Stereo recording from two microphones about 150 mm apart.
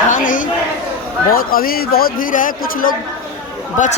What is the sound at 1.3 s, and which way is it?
A man's voice, 75° left (ahead or behind).